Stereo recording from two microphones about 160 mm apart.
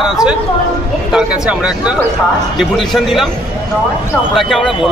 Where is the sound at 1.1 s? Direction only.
5° right (ahead or behind).